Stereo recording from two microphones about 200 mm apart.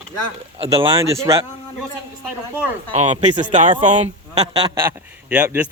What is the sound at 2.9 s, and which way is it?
A man's voice, 35° right (ahead or behind).